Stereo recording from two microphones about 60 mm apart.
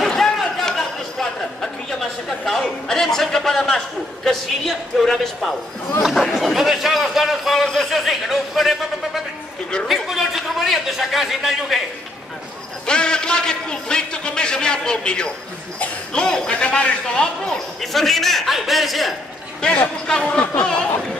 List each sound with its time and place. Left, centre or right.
0.0 s a sound: centre
2.2 s a man's voice: centre
6.0 s a man's voice: centre
12.8 s a man's voice: centre
17.7 s a man's voice: centre
19.6 s a man's voice: centre